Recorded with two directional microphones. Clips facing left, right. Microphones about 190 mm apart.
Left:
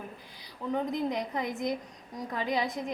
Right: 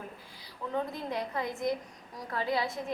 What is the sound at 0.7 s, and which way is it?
A woman's voice, 15° left (ahead or behind).